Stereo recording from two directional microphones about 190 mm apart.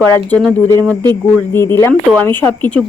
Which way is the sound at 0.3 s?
5° left (ahead or behind).